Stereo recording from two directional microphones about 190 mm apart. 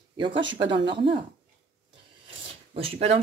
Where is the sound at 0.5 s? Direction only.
25° right (ahead or behind).